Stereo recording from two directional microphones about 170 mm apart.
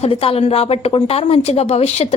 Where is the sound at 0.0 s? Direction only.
35° left (ahead or behind).